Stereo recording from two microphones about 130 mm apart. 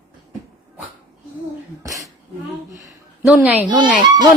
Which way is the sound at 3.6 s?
35° right (ahead or behind).